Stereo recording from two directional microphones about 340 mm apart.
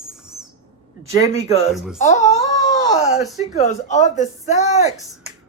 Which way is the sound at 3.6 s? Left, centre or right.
Left.